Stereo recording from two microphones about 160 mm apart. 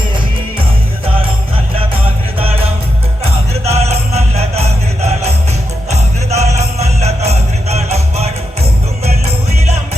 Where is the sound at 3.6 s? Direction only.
40° right (ahead or behind).